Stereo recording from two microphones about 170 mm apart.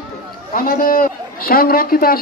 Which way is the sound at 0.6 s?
55° left (ahead or behind).